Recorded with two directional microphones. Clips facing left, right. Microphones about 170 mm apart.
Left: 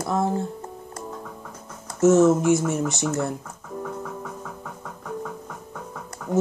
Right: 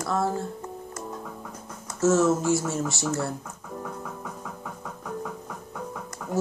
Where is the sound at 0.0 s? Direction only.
20° left (ahead or behind).